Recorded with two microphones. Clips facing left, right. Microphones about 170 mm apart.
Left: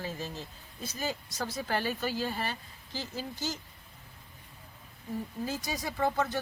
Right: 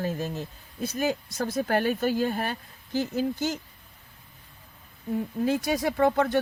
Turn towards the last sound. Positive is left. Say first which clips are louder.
# right 7 dB
turn(degrees=-60)  # may be behind; listen again after turning